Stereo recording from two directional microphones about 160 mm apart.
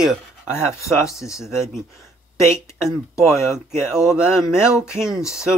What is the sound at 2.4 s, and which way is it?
Speech, 15° left (ahead or behind).